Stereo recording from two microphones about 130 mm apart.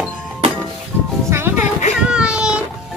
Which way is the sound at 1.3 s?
20° right (ahead or behind).